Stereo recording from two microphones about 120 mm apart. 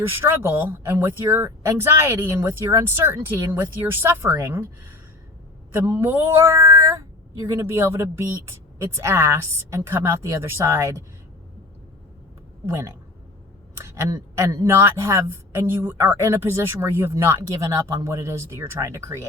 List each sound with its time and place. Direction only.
0.2 s speech: 20° right (ahead or behind)
5.8 s speech: 20° right (ahead or behind)
12.6 s speech: 25° right (ahead or behind)
14.3 s speech: 25° right (ahead or behind)